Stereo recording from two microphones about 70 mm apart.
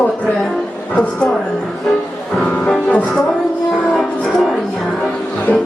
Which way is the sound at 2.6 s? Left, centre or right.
Centre.